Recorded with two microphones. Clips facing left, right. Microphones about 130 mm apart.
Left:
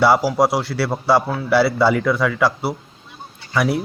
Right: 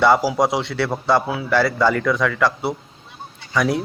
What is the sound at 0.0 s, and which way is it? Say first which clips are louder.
Speech: left 1 dB; 5° left (ahead or behind).